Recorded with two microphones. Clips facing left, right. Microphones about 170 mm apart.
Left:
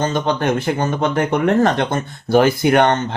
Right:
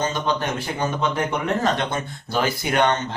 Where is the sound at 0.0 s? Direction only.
50° left (ahead or behind).